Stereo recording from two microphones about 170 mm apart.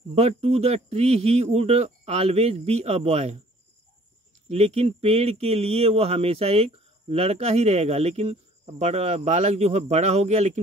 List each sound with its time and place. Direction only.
0.1 s speech: 35° right (ahead or behind)
4.5 s speech: 40° right (ahead or behind)